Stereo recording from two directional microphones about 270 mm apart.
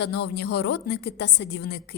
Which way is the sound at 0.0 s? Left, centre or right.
Left.